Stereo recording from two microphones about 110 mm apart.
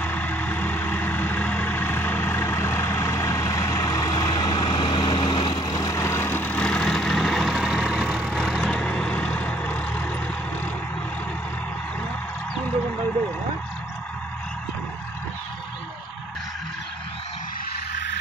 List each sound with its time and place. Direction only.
0.0 s vehicle: 15° left (ahead or behind)